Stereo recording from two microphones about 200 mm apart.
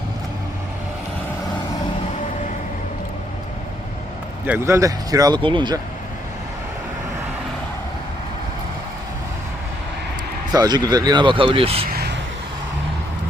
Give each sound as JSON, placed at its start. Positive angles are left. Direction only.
{"t": 4.4, "sound": "speech", "side_deg": -10}
{"t": 10.5, "sound": "speech", "side_deg": -20}